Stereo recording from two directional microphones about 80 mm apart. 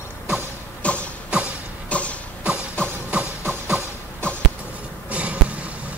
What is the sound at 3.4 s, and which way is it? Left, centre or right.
Music, right.